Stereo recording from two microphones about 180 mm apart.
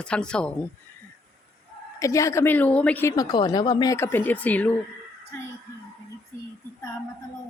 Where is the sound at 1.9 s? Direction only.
15° left (ahead or behind).